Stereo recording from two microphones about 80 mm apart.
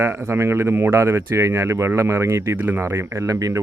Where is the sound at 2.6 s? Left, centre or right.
Right.